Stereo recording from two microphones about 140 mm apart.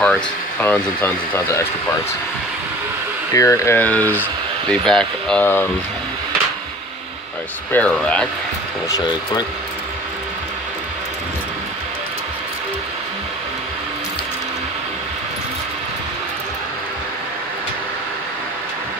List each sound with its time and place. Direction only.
0.0 s speech: 10° left (ahead or behind)
3.3 s speech: 20° left (ahead or behind)
7.7 s speech: 10° left (ahead or behind)
8.8 s speech: 30° left (ahead or behind)